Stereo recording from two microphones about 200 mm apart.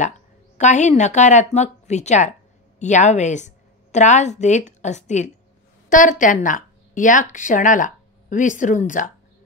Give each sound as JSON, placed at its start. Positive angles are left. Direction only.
{"t": 0.6, "sound": "a woman's voice", "side_deg": 35}